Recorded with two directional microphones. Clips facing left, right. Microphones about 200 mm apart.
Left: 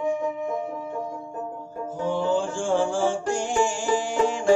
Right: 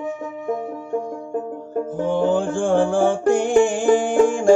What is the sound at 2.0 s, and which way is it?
Music, 55° right (ahead or behind).